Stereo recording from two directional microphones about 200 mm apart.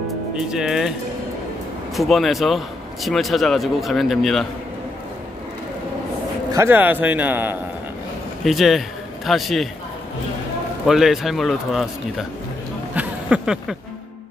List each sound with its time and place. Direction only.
0.3 s speech: 5° right (ahead or behind)
2.0 s speech: centre (ahead or behind)
6.5 s a man's voice: 10° right (ahead or behind)
10.9 s speech: centre (ahead or behind)
12.9 s a sound: 5° right (ahead or behind)